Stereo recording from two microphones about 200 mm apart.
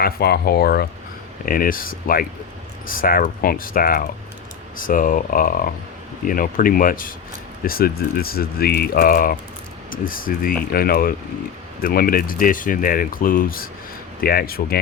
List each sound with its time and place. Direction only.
0.0 s speech: 50° left (ahead or behind)